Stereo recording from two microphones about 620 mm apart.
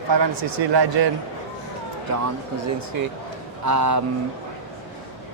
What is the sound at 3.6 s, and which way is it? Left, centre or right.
Speech, right.